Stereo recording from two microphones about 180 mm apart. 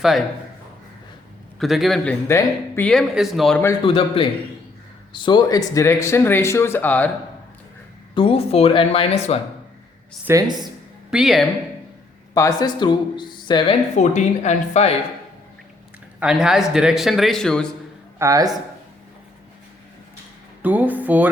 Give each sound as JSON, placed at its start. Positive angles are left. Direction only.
{"t": 0.0, "sound": "speech", "side_deg": 0}
{"t": 1.5, "sound": "speech", "side_deg": 0}
{"t": 2.2, "sound": "speech", "side_deg": 15}
{"t": 3.8, "sound": "a man's voice", "side_deg": 30}
{"t": 8.1, "sound": "speech", "side_deg": 30}
{"t": 10.2, "sound": "speech", "side_deg": -20}
{"t": 11.1, "sound": "speech", "side_deg": 0}
{"t": 12.3, "sound": "speech", "side_deg": 20}
{"t": 13.9, "sound": "speech", "side_deg": 40}
{"t": 16.2, "sound": "speech", "side_deg": -5}
{"t": 18.2, "sound": "a man's voice", "side_deg": -20}
{"t": 20.6, "sound": "speech", "side_deg": -10}